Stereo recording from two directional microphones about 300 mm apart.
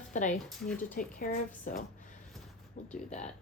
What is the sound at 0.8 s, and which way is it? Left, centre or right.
Speech, left.